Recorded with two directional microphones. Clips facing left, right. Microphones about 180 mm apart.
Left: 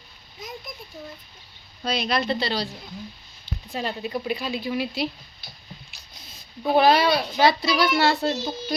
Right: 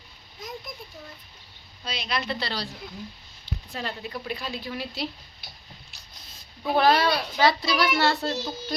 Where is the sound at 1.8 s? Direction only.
45° left (ahead or behind).